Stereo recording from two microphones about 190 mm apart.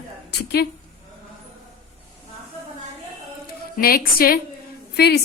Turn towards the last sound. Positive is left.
turn(degrees=60)  # may be behind; listen again after turning